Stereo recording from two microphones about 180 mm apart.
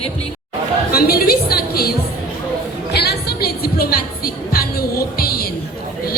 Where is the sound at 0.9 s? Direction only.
60° left (ahead or behind).